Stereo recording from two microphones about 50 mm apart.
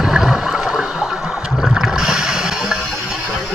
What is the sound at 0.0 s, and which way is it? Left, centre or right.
Toilet flush, centre.